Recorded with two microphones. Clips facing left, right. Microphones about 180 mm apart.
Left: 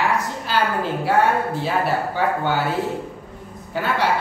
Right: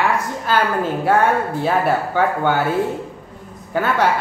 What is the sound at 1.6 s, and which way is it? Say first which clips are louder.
A woman's voice: right 3 dB; 50° right (ahead or behind).